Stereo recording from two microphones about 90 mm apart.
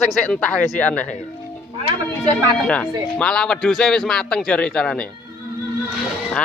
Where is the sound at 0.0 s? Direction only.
15° left (ahead or behind).